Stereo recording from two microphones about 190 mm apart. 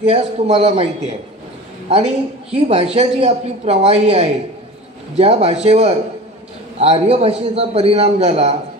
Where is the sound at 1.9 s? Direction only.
30° right (ahead or behind).